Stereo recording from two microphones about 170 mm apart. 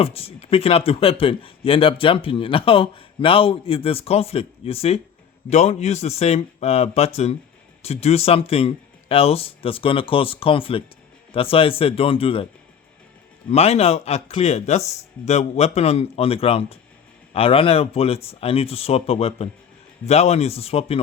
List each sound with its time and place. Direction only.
0.0 s speech: 35° left (ahead or behind)
13.5 s speech: 40° left (ahead or behind)